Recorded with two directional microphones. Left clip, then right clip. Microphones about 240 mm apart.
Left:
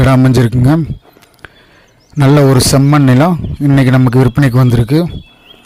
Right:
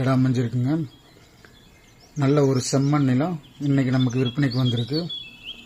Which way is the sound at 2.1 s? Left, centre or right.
Left.